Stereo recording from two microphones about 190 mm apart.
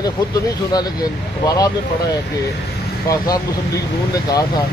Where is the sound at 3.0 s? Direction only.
20° left (ahead or behind).